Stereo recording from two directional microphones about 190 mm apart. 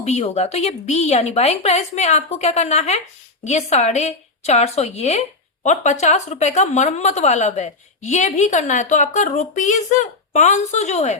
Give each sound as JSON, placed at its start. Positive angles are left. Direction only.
{"t": 0.0, "sound": "a woman's voice", "side_deg": 35}